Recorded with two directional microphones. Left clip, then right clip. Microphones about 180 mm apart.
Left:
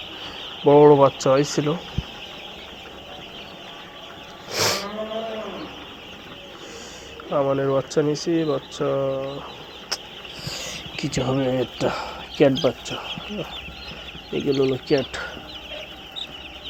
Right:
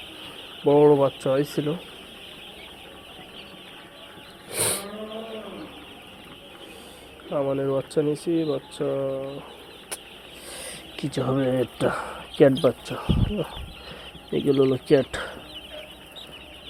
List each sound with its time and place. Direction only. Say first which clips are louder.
0.7 s speech: left 4 dB; 20° right (ahead or behind)
4.5 s a sound: left 6 dB; 20° right (ahead or behind)
7.3 s speech: left 4 dB; 20° right (ahead or behind)
9.9 s a sound: left 9 dB; 40° right (ahead or behind)
10.4 s speech: left 7 dB; 30° right (ahead or behind)
12.8 s speech: even; 45° right (ahead or behind)
14.6 s speech: right 2 dB; 35° right (ahead or behind)